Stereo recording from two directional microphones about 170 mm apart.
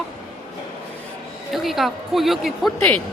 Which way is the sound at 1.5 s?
Centre (ahead or behind).